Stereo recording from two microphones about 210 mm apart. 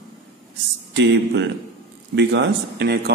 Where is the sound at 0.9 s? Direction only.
60° right (ahead or behind).